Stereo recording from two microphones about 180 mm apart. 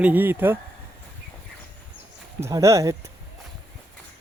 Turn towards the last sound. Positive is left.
turn(degrees=-20)  # may be behind; listen again after turning